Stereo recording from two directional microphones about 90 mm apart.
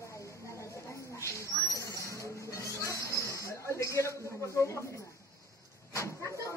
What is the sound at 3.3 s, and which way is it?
Snake, 35° left (ahead or behind).